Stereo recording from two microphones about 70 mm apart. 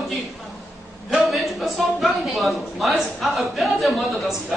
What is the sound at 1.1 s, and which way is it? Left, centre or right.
A woman's voice, centre.